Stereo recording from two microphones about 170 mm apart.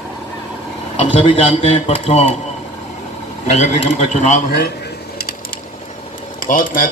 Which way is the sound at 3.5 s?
40° left (ahead or behind).